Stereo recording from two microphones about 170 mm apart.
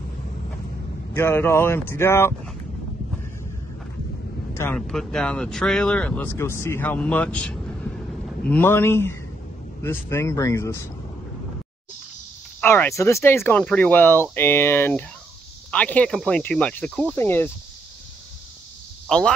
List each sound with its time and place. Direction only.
1.1 s speech: 15° left (ahead or behind)
4.7 s speech: centre (ahead or behind)
12.5 s speech: 10° left (ahead or behind)
19.0 s speech: 5° left (ahead or behind)